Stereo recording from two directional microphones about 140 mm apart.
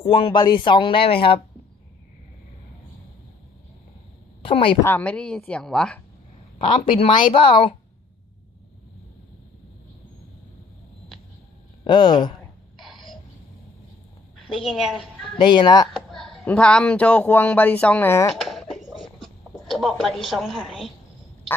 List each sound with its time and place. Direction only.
0.0 s speech: 40° left (ahead or behind)
4.4 s speech: 40° left (ahead or behind)
4.8 s speech: 15° left (ahead or behind)
6.7 s speech: 40° left (ahead or behind)
11.9 s speech: 35° left (ahead or behind)
12.8 s a sound: centre (ahead or behind)
14.4 s a woman's voice: centre (ahead or behind)
15.4 s speech: 35° left (ahead or behind)
15.9 s a sound: centre (ahead or behind)
16.4 s speech: 10° left (ahead or behind)
18.3 s a sound: centre (ahead or behind)
19.7 s a woman's voice: centre (ahead or behind)